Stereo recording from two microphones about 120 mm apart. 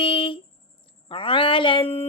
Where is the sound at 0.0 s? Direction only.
45° left (ahead or behind).